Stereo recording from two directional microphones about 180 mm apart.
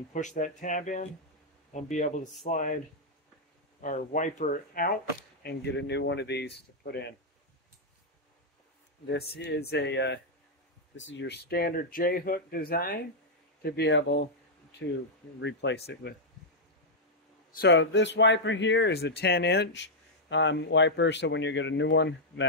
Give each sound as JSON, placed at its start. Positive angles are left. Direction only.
{"t": 0.1, "sound": "speech", "side_deg": 45}
{"t": 3.8, "sound": "speech", "side_deg": 45}
{"t": 5.4, "sound": "speech", "side_deg": 65}
{"t": 9.3, "sound": "speech", "side_deg": 65}
{"t": 11.0, "sound": "speech", "side_deg": 85}
{"t": 15.4, "sound": "speech", "side_deg": 80}
{"t": 15.9, "sound": "speech", "side_deg": 65}
{"t": 17.6, "sound": "speech", "side_deg": 90}